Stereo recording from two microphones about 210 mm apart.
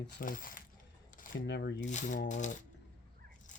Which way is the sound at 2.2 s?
35° left (ahead or behind).